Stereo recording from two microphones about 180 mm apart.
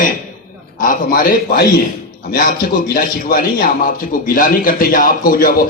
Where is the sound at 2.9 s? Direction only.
50° left (ahead or behind).